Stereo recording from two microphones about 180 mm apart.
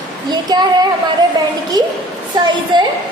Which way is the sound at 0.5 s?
25° right (ahead or behind).